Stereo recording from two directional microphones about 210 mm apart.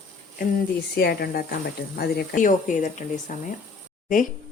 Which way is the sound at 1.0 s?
50° left (ahead or behind).